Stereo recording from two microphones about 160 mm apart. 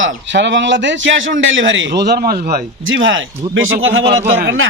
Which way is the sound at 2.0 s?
80° right.